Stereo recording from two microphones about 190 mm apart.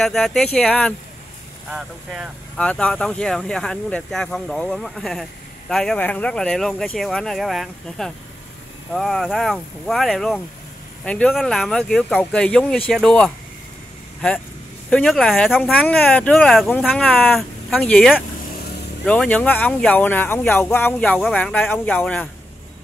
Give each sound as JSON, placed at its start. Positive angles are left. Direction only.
{"t": 0.0, "sound": "speech", "side_deg": 0}
{"t": 2.6, "sound": "speech", "side_deg": 5}
{"t": 14.9, "sound": "speech", "side_deg": 5}